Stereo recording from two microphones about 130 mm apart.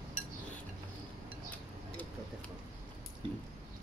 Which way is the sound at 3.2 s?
40° right (ahead or behind).